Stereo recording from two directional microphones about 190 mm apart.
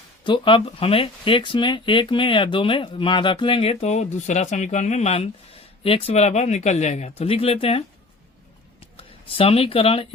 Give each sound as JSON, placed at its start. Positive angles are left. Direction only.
{"t": 0.3, "sound": "speech", "side_deg": 25}